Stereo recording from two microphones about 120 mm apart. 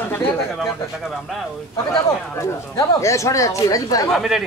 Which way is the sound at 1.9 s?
25° left (ahead or behind).